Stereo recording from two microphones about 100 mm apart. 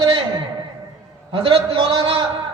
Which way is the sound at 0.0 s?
45° right (ahead or behind).